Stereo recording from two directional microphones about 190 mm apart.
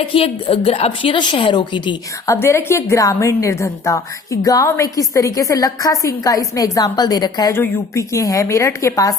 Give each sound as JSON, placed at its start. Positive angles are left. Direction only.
{"t": 0.0, "sound": "a woman's voice", "side_deg": 30}